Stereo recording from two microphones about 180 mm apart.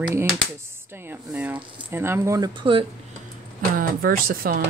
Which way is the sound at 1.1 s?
10° right (ahead or behind).